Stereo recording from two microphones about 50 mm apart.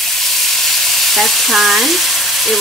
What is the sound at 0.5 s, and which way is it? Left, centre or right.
Frying, centre.